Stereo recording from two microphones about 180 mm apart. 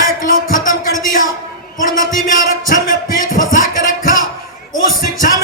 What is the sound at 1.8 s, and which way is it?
A man's voice, 50° left (ahead or behind).